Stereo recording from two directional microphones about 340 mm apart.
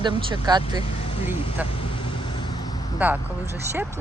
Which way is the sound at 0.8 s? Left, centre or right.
Centre.